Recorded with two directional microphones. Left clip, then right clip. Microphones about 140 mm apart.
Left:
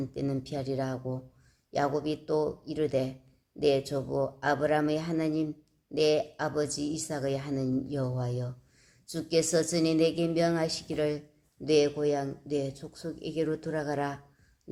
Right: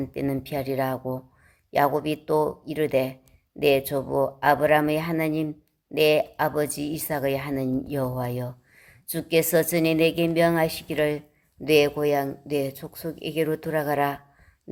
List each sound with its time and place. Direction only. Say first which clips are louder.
0.0 s a woman's voice: right 5 dB; 20° right (ahead or behind)